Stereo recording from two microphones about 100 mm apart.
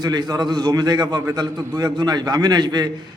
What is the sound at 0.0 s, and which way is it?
A man's voice, 40° right (ahead or behind).